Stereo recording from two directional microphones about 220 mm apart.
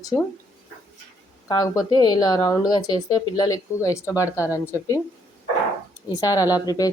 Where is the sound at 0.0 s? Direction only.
15° left (ahead or behind).